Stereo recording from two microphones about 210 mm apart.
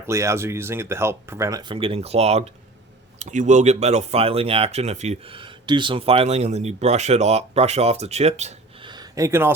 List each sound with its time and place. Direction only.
0.1 s speech: 15° right (ahead or behind)